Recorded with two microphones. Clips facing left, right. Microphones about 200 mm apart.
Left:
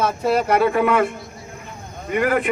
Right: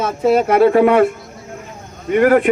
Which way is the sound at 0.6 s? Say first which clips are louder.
Right 7 dB; 65° right (ahead or behind).